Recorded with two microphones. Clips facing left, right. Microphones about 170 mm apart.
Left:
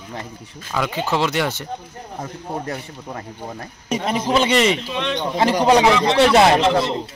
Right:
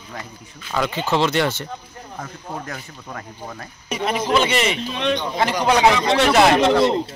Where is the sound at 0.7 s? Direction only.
5° left (ahead or behind).